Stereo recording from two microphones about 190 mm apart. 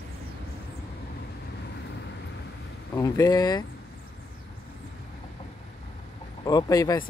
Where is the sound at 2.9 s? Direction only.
20° left (ahead or behind).